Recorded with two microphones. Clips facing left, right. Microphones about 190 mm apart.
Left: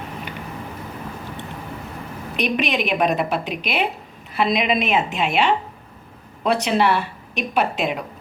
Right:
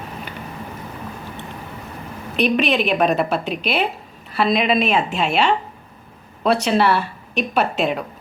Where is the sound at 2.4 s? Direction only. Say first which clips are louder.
Right 4 dB; 15° left (ahead or behind).